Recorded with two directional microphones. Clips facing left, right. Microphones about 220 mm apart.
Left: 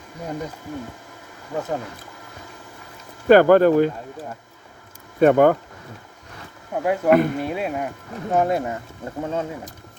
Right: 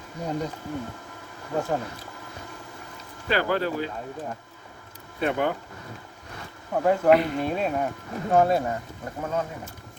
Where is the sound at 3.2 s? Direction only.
50° left (ahead or behind).